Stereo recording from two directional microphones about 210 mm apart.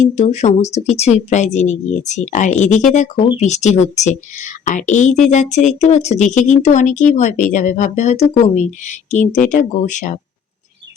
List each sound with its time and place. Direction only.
0.0 s a woman's voice: 35° left (ahead or behind)